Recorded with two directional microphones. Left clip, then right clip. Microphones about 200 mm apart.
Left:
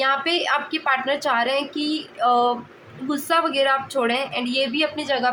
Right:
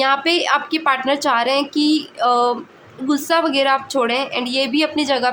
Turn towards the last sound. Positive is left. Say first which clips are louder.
# right 4 dB
turn(degrees=-25)  # may be behind; listen again after turning